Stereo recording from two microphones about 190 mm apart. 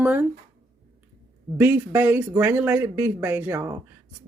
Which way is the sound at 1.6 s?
10° right (ahead or behind).